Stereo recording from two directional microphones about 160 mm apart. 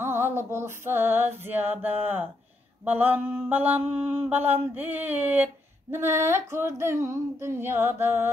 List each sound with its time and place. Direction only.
0.0 s female singing: 15° right (ahead or behind)
4.7 s a sound: 10° right (ahead or behind)
6.5 s female singing: 15° right (ahead or behind)